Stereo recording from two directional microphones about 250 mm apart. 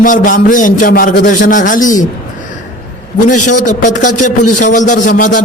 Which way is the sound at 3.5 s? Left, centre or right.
Left.